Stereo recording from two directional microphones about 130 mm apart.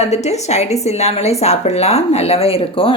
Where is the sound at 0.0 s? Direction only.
60° left (ahead or behind).